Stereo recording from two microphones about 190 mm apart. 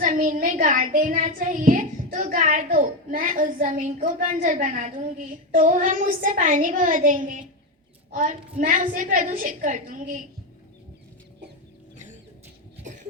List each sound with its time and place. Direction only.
0.0 s child singing: 45° right (ahead or behind)
4.4 s a woman's voice: 40° right (ahead or behind)
5.5 s child singing: 45° right (ahead or behind)
12.8 s cough: 40° right (ahead or behind)